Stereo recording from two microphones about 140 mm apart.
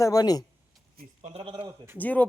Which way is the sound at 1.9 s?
10° left (ahead or behind).